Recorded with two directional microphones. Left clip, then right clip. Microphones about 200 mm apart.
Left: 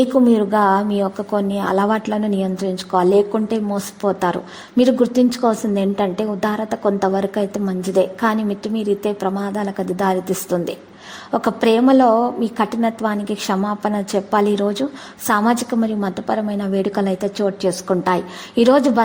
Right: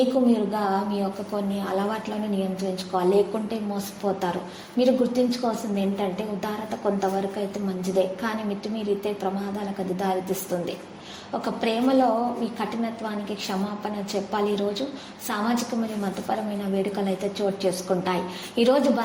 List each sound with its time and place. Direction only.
0.3 s a woman's voice: 45° left (ahead or behind)